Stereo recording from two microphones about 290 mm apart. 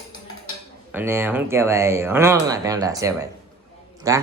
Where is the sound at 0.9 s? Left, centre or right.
Centre.